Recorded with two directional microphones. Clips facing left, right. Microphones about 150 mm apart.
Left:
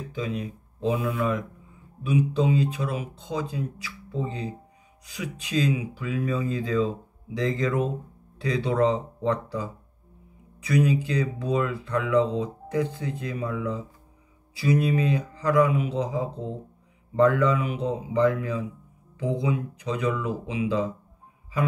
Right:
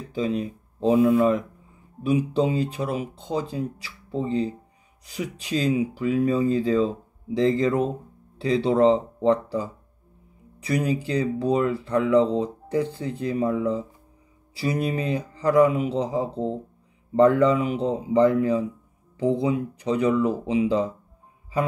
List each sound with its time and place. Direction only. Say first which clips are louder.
0.1 s speech: right 6 dB; 30° right (ahead or behind)